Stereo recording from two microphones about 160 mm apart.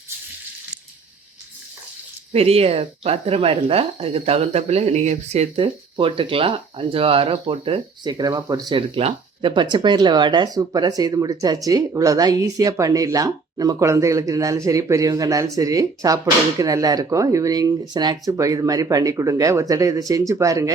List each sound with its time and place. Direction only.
2.3 s speech: 40° right (ahead or behind); by 20.7 s 20° right (ahead or behind)